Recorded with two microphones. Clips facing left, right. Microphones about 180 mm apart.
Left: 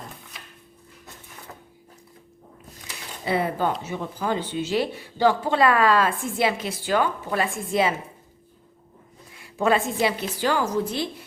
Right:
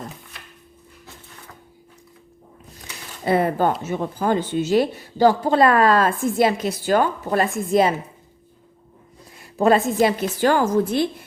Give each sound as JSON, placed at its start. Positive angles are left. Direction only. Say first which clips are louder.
{"t": 3.2, "sound": "speech", "louder": "right 5 dB", "side_deg": -50}
{"t": 9.4, "sound": "speech", "louder": "right 5 dB", "side_deg": -40}